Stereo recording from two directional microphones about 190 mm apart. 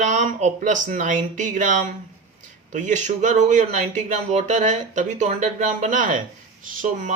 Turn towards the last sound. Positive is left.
turn(degrees=-45)  # may be behind; listen again after turning